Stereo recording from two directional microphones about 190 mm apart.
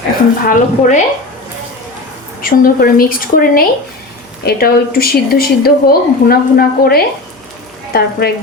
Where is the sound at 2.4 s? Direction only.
50° left (ahead or behind).